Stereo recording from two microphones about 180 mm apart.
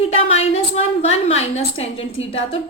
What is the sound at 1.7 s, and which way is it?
Speech, 90° left.